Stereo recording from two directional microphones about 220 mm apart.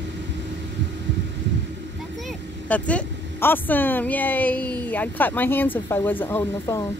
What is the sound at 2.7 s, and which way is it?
Speech, 5° left (ahead or behind).